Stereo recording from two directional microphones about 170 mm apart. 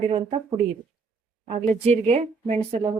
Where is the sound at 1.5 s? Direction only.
45° right (ahead or behind).